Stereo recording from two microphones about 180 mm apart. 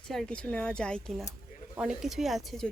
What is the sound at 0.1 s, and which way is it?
Speech, 5° left (ahead or behind).